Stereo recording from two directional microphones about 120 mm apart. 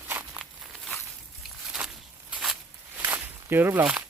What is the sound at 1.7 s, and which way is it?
Walk, 10° right (ahead or behind).